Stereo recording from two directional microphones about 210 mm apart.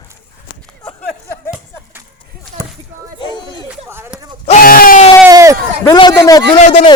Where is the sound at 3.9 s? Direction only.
10° right (ahead or behind).